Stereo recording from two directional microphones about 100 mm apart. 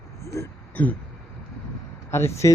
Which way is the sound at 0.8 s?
20° left (ahead or behind).